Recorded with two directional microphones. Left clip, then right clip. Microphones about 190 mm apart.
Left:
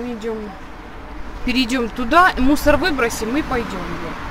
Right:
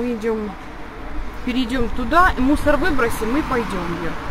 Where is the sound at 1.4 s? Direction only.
15° left (ahead or behind).